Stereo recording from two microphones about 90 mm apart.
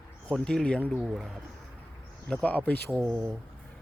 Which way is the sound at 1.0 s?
5° right (ahead or behind).